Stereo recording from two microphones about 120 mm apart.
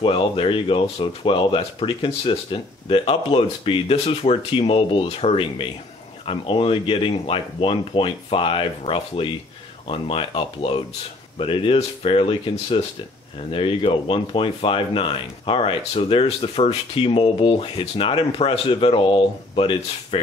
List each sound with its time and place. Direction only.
0.0 s speech: 45° left (ahead or behind)